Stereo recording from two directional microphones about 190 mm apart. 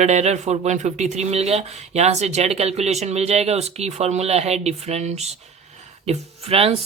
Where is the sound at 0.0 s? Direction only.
35° right (ahead or behind).